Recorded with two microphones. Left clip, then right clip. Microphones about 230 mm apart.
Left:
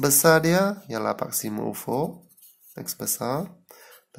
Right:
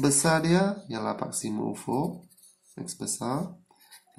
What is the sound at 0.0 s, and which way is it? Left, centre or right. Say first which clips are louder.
Speech: left 6 dB; left.